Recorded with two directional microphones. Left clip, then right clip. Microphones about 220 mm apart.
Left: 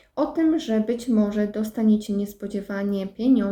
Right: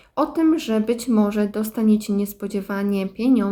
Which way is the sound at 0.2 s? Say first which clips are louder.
Right 3 dB; 30° right (ahead or behind).